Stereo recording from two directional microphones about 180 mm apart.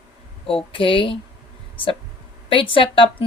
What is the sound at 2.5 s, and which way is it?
Speech, 30° left (ahead or behind).